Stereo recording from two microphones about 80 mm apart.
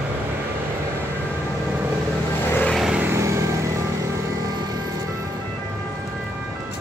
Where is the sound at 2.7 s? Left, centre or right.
Centre.